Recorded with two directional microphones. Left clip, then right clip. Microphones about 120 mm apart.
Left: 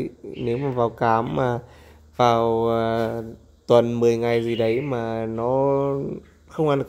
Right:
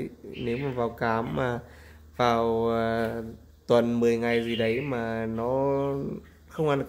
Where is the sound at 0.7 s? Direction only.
20° left (ahead or behind).